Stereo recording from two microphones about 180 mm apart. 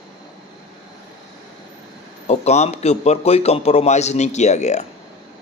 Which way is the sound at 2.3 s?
35° left (ahead or behind).